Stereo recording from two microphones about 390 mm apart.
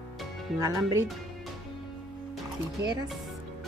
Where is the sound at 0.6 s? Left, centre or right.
Centre.